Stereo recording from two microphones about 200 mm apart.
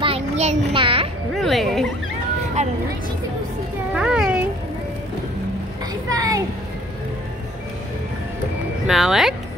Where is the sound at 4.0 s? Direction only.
5° right (ahead or behind).